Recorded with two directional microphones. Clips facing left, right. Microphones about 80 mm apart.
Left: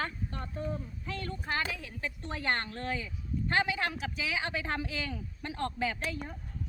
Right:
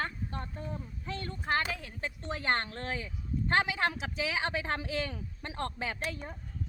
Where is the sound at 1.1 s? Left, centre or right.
Right.